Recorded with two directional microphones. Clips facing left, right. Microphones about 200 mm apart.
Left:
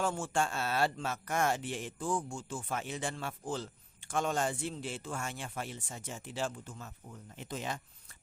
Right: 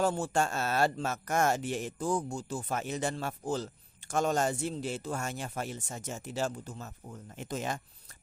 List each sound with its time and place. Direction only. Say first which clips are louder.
0.0 s speech: right 4 dB; 40° right (ahead or behind)